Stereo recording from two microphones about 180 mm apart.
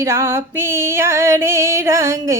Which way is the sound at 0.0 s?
15° right (ahead or behind).